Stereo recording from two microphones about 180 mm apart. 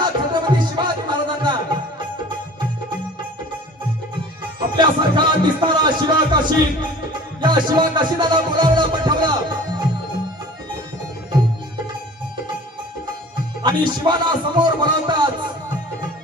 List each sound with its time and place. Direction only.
0.0 s music: 25° right (ahead or behind)
4.8 s speech: 25° right (ahead or behind)
7.4 s music: 25° right (ahead or behind)
13.6 s a man's voice: 25° right (ahead or behind)